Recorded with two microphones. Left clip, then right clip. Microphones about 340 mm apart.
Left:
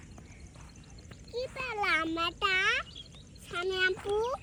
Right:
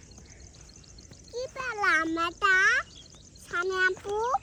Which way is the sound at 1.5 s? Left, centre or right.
Right.